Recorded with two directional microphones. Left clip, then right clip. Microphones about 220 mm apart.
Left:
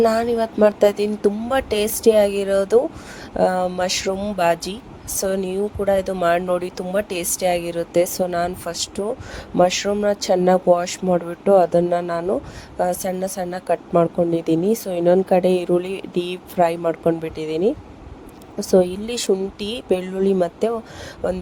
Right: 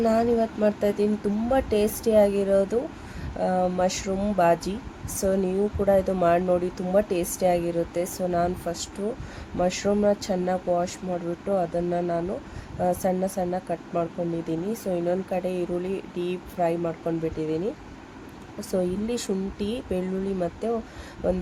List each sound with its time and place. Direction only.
0.0 s a woman's voice: 30° left (ahead or behind)